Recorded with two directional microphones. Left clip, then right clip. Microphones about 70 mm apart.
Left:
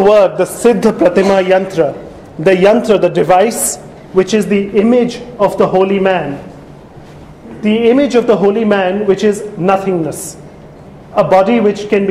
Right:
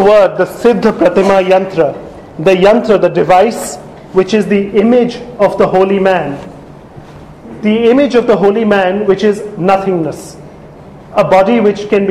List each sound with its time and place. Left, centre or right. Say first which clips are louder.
0.0 s a man's voice: right 1 dB; left
7.6 s a man's voice: right 1 dB; left
11.1 s a man's voice: right 1 dB; left